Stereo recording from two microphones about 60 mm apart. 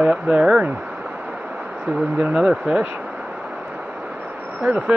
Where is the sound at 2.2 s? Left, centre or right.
Centre.